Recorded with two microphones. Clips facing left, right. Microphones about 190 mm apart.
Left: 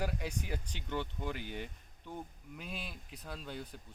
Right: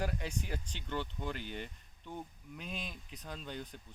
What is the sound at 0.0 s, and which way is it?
Speech, 5° left (ahead or behind).